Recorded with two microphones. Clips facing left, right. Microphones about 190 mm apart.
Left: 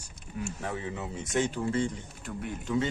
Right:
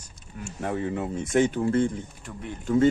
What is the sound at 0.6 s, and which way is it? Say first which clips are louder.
A man's voice: right 12 dB; 55° right (ahead or behind).